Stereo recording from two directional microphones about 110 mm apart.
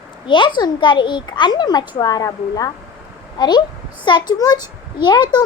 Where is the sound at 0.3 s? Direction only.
45° left (ahead or behind).